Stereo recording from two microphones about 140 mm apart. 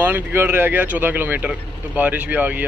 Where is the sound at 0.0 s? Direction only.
15° right (ahead or behind).